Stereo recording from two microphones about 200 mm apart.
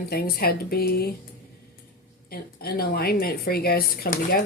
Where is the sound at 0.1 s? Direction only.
50° left (ahead or behind).